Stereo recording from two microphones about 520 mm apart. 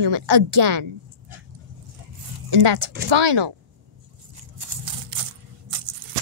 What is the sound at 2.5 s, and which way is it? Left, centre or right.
Speech, right.